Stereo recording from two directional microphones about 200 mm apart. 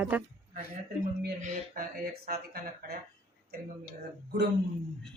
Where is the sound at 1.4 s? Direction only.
35° right (ahead or behind).